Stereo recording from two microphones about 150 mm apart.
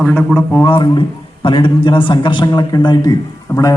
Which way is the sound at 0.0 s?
5° left (ahead or behind).